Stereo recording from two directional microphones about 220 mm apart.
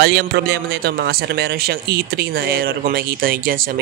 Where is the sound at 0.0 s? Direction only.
50° right (ahead or behind).